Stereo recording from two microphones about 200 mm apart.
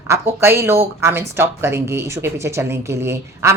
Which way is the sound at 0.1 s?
10° right (ahead or behind).